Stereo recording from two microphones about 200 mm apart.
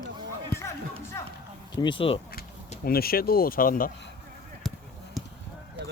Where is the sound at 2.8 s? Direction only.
50° left (ahead or behind).